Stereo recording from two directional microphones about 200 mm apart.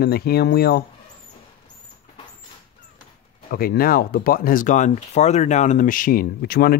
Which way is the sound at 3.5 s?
50° left (ahead or behind).